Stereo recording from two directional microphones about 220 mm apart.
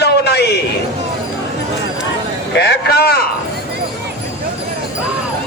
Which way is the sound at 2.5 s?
45° left (ahead or behind).